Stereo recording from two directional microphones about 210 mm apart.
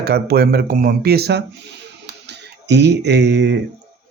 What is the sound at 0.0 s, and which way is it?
Speech, 50° right (ahead or behind).